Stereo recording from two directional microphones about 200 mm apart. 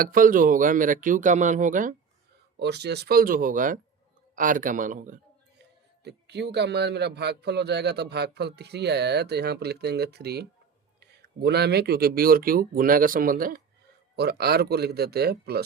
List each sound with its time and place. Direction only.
0.0 s speech: 45° right (ahead or behind)
2.6 s speech: 55° right (ahead or behind); by 5.2 s 40° right (ahead or behind)
5.5 s a man's voice: 55° right (ahead or behind)